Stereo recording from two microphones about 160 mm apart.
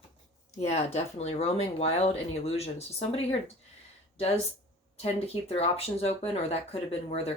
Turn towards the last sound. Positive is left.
turn(degrees=40)  # may be behind; listen again after turning